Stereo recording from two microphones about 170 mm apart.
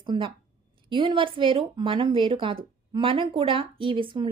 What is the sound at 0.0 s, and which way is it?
A woman's voice, 30° right (ahead or behind).